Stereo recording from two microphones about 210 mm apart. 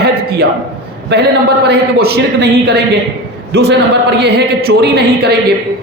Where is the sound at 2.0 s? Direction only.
50° right (ahead or behind).